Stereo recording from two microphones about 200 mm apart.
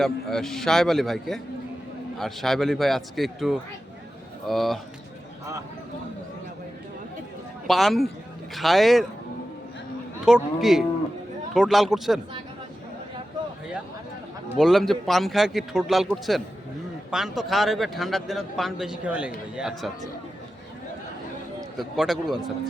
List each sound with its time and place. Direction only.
0.0 s a man's voice: centre (ahead or behind)
7.7 s a man's voice: centre (ahead or behind)
10.2 s a man's voice: centre (ahead or behind)
14.6 s a man's voice: centre (ahead or behind)
21.8 s a man's voice: centre (ahead or behind)